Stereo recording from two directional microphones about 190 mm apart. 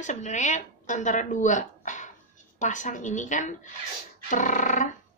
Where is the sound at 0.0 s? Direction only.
40° left (ahead or behind).